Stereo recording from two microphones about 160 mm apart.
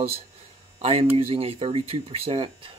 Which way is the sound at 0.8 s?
40° right (ahead or behind).